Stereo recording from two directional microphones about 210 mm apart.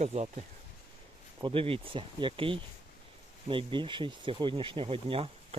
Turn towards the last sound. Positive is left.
turn(degrees=-25)  # may be behind; listen again after turning